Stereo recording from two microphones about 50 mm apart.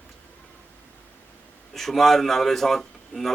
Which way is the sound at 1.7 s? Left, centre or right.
Centre.